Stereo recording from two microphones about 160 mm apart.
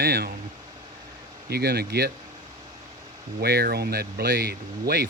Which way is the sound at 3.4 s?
80° right.